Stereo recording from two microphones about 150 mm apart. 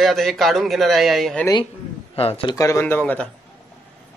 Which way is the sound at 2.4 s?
20° left (ahead or behind).